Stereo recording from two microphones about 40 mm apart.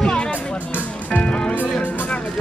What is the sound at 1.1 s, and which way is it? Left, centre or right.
Music, left.